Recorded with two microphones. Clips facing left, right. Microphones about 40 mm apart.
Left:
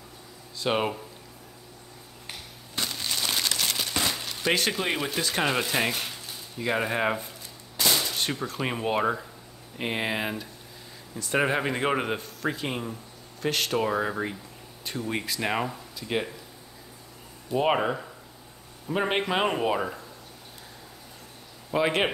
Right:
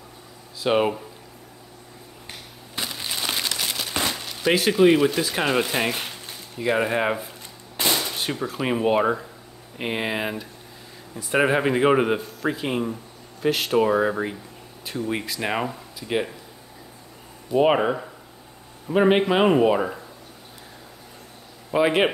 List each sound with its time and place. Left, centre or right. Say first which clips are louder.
0.6 s speech: right 5 dB; centre
2.2 s a sound: even; centre
4.1 s speech: right 4 dB; centre
7.9 s gunshot: right 2 dB; centre
8.2 s speech: right 3 dB; centre
17.5 s speech: right 5 dB; centre
21.6 s speech: right 5 dB; centre